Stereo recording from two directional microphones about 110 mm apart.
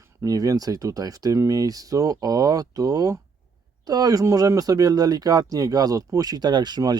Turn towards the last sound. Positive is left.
turn(degrees=-40)  # may be behind; listen again after turning